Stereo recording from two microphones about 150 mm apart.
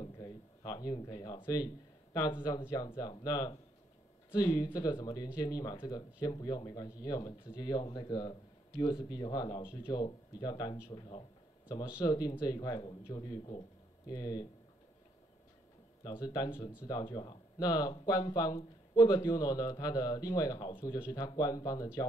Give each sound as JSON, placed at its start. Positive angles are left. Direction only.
{"t": 0.0, "sound": "a sound", "side_deg": 25}
{"t": 1.4, "sound": "speech", "side_deg": 25}
{"t": 16.0, "sound": "speech", "side_deg": 25}